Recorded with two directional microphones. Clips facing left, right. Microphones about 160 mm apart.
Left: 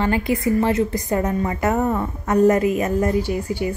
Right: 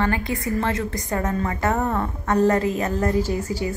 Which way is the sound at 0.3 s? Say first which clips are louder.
Left 5 dB; 20° left (ahead or behind).